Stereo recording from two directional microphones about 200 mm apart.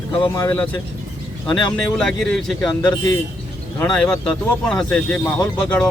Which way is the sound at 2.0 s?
5° left (ahead or behind).